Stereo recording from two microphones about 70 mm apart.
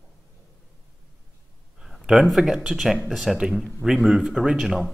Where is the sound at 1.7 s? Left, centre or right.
Centre.